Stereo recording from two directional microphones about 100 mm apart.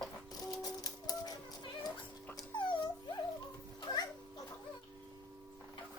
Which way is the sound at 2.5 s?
50° left (ahead or behind).